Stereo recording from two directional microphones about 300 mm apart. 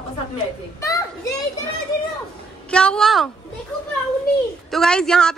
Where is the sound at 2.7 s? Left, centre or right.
Centre.